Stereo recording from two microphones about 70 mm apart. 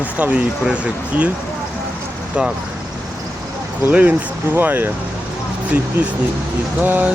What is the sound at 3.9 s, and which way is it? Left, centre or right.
Speech, right.